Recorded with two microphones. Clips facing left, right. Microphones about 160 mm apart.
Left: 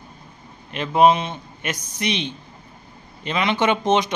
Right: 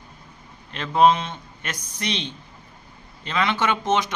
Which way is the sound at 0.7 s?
15° left (ahead or behind).